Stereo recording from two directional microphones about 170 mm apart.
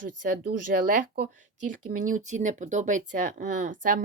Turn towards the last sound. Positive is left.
turn(degrees=-50)  # may be behind; listen again after turning